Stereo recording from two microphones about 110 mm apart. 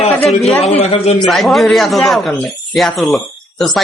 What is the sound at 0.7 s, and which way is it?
Speech, 65° left (ahead or behind).